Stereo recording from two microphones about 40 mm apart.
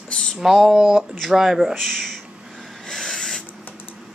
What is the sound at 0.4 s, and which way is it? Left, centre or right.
Speech, centre.